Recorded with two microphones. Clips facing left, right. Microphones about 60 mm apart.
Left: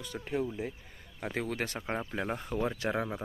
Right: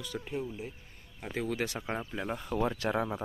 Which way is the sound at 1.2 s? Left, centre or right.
Left.